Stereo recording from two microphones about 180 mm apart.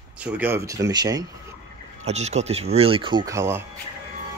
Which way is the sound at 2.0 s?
40° right (ahead or behind).